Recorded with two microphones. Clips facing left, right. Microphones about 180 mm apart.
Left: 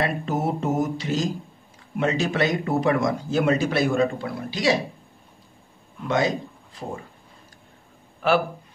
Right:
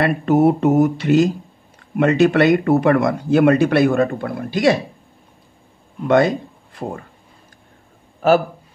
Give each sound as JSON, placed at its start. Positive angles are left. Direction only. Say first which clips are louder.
{"t": 0.0, "sound": "speech", "louder": "right 10 dB", "side_deg": -65}
{"t": 6.0, "sound": "speech", "louder": "right 8 dB", "side_deg": -60}
{"t": 8.2, "sound": "a man's voice", "louder": "right 6 dB", "side_deg": -45}